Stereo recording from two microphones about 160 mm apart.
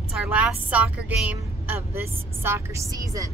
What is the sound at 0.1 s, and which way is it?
A woman's voice, 5° right (ahead or behind).